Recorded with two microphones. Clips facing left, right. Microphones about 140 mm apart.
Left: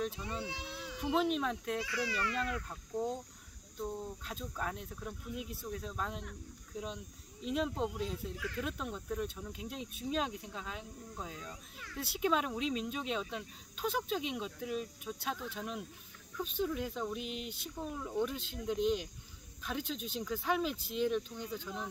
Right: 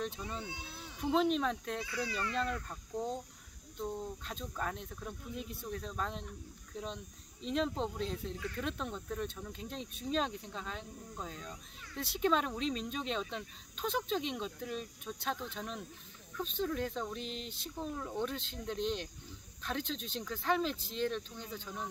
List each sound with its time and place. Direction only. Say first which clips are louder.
0.0 s speech: left 2 dB; centre (ahead or behind)
0.5 s speech: left 3 dB; 90° left
1.0 s speech: right 2 dB; 5° left (ahead or behind)